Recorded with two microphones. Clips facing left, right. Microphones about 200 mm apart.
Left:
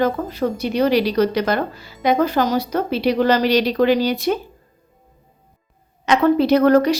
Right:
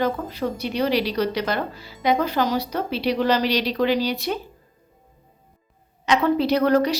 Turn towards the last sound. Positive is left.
turn(degrees=50)  # may be behind; listen again after turning